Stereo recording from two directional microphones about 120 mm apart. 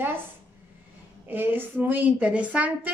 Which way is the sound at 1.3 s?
15° right (ahead or behind).